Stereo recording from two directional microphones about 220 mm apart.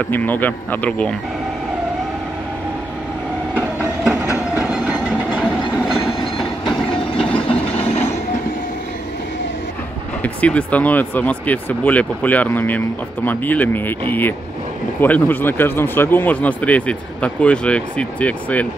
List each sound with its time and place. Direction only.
0.0 s speech: 10° left (ahead or behind)
3.5 s train: 5° right (ahead or behind)
7.2 s a sound: 5° left (ahead or behind)
7.4 s a sound: 25° left (ahead or behind)
10.2 s speech: 5° left (ahead or behind)
15.0 s speech: 10° left (ahead or behind)